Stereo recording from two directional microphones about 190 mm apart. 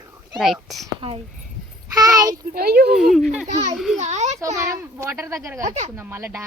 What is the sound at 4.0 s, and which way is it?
Speech, 35° right (ahead or behind).